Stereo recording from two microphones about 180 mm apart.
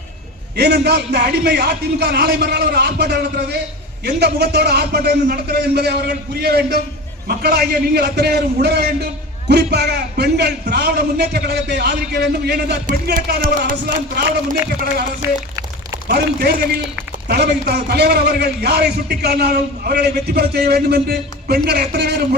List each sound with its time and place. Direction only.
0.5 s a man's voice: 65° right (ahead or behind)
15.2 s speech: 15° right (ahead or behind)
16.0 s a man's voice: 60° right (ahead or behind)